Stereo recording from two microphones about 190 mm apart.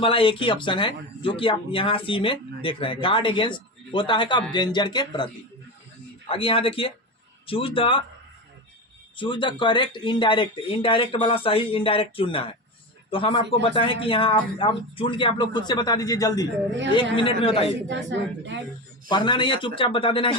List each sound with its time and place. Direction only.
0.0 s speech: 30° left (ahead or behind)
9.1 s speech: 25° left (ahead or behind)
17.8 s a woman's voice: 70° right (ahead or behind)
19.0 s speech: 25° left (ahead or behind)